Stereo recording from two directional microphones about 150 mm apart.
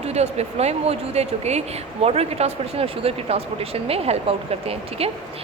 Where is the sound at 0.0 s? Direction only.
45° right (ahead or behind).